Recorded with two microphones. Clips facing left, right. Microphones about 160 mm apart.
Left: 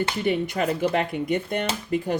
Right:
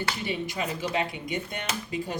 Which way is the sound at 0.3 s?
60° left (ahead or behind).